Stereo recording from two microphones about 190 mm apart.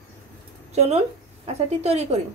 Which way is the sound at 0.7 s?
35° right (ahead or behind).